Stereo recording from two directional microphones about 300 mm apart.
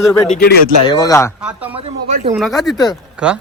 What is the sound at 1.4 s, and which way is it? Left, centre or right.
Speech, centre.